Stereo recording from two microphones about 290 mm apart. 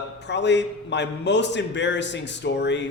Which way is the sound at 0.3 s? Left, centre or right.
Left.